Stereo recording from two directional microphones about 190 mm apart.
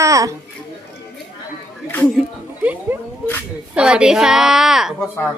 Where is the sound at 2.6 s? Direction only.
10° right (ahead or behind).